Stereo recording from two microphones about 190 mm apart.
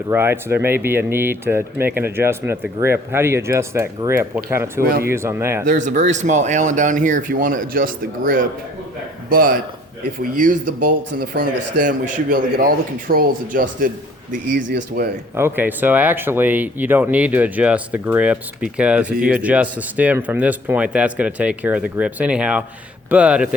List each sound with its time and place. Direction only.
0.1 s speech: 10° right (ahead or behind)
4.8 s speech: 50° right (ahead or behind)
5.0 s speech: 10° right (ahead or behind)
5.6 s speech: 40° right (ahead or behind)
15.4 s speech: 10° right (ahead or behind)